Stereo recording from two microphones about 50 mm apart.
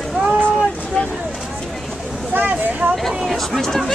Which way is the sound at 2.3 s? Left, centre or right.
Right.